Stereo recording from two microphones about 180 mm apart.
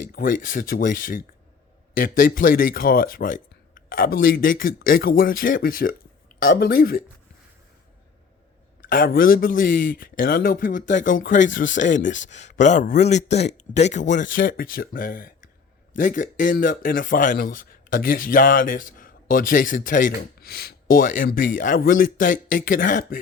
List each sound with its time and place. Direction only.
0.1 s speech: 50° left (ahead or behind)
8.8 s speech: 50° left (ahead or behind)